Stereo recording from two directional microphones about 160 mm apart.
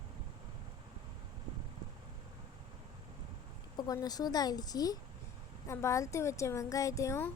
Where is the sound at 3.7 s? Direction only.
25° left (ahead or behind).